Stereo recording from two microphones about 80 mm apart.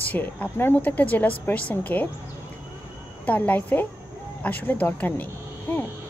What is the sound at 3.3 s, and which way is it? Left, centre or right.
A woman's voice, left.